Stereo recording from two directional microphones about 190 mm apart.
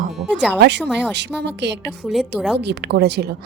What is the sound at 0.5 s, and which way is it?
Speech, 65° right (ahead or behind).